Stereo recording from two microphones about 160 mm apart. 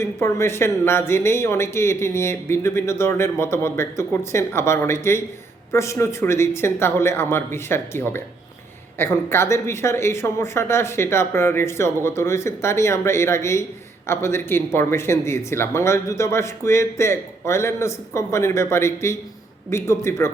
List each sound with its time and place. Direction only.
0.0 s speech: 15° left (ahead or behind)